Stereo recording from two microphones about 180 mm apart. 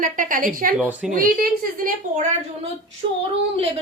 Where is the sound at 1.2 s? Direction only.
50° right (ahead or behind).